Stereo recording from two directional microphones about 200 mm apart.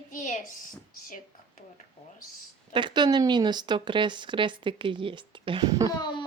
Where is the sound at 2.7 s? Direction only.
20° right (ahead or behind).